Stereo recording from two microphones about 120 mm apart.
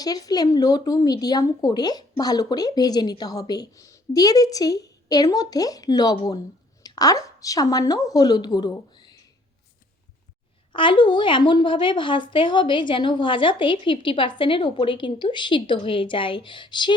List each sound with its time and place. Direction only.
0.0 s speech: 30° left (ahead or behind)
10.7 s a woman's voice: 45° left (ahead or behind)